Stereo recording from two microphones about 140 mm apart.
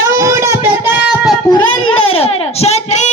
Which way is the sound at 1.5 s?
40° left (ahead or behind).